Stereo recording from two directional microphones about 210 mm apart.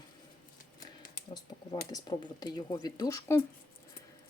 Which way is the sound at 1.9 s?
20° left (ahead or behind).